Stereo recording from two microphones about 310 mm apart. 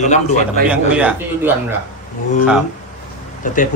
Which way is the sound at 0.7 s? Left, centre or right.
Centre.